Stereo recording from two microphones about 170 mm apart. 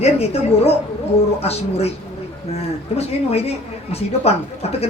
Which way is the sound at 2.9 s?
35° left (ahead or behind).